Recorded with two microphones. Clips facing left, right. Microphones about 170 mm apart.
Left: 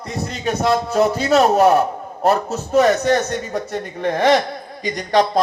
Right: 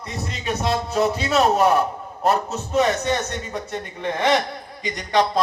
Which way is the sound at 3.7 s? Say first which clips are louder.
Left 5 dB; 35° left (ahead or behind).